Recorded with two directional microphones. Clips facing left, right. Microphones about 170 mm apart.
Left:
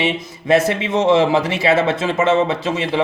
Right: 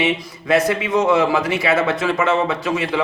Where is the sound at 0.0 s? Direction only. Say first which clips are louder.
Even; 25° left (ahead or behind).